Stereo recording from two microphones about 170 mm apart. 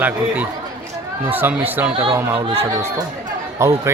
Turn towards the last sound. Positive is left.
turn(degrees=-15)  # may be behind; listen again after turning